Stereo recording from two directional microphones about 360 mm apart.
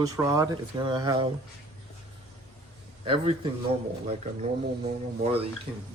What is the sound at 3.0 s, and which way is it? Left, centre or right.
A man's voice, centre.